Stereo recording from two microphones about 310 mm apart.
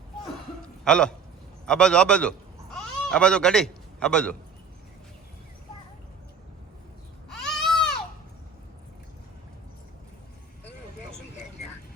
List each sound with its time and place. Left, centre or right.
0.9 s a man's voice: centre
7.3 s baby cry: centre